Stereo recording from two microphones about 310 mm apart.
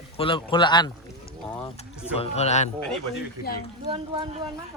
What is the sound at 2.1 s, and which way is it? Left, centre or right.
A man's voice, left.